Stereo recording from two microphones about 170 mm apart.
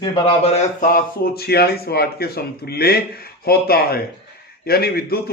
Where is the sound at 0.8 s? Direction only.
65° left (ahead or behind).